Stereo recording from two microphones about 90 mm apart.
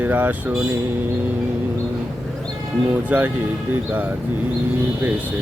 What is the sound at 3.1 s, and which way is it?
Mantra, 20° right (ahead or behind).